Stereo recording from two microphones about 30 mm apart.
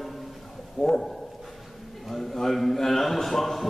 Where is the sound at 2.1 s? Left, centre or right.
Centre.